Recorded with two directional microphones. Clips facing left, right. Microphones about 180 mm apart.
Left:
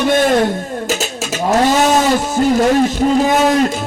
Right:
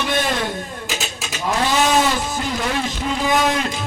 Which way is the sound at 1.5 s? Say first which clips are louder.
Left 6 dB; 45° left (ahead or behind).